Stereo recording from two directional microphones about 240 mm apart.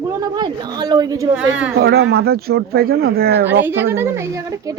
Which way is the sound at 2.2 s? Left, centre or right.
Right.